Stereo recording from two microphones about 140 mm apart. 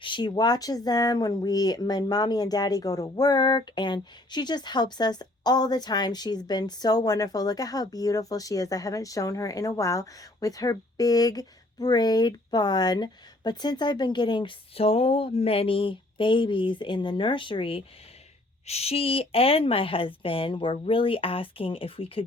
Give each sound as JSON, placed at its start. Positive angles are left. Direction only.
{"t": 0.0, "sound": "speech", "side_deg": 35}